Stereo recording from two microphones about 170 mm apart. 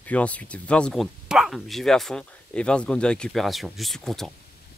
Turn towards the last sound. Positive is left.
turn(degrees=0)  # may be behind; listen again after turning